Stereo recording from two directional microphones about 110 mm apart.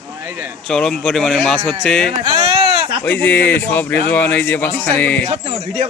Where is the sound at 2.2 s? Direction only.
50° right (ahead or behind).